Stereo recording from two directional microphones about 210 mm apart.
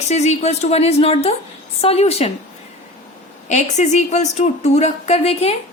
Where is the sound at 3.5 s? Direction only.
35° left (ahead or behind).